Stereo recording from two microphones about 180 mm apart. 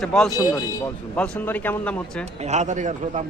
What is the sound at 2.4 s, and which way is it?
Speech, 40° right (ahead or behind).